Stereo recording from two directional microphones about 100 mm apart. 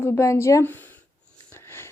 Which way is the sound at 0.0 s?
25° left (ahead or behind).